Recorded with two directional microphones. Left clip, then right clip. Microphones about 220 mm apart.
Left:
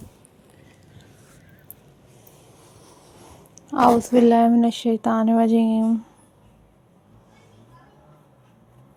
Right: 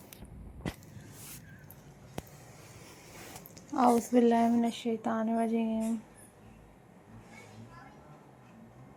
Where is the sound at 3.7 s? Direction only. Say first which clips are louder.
Left 10 dB; 30° left (ahead or behind); by 5.9 s 55° left (ahead or behind).